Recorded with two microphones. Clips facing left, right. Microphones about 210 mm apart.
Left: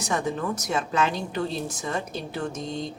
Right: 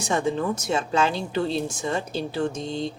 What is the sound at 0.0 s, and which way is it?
A woman's voice, 25° right (ahead or behind).